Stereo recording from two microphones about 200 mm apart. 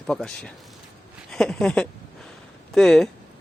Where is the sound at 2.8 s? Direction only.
Centre (ahead or behind).